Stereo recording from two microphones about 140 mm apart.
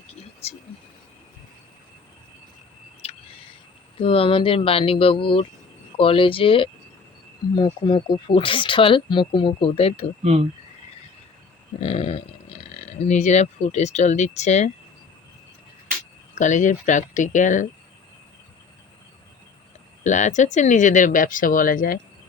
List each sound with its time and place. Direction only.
3.0 s a sound: 45° left (ahead or behind)
4.0 s speech: 40° left (ahead or behind)
11.8 s speech: 45° left (ahead or behind)
16.4 s speech: 60° left (ahead or behind)
20.1 s speech: 60° left (ahead or behind); by 21.9 s 80° left